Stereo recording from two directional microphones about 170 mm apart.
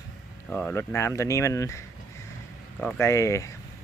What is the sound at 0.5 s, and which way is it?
Speech, 15° left (ahead or behind).